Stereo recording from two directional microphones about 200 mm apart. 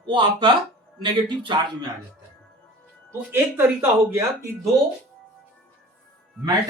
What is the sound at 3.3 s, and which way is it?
Speech, 10° right (ahead or behind).